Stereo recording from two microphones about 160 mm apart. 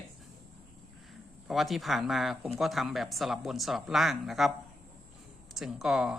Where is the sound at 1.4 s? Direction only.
Centre (ahead or behind).